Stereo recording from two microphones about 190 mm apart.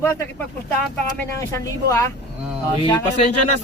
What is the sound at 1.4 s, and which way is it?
Speech, 15° left (ahead or behind).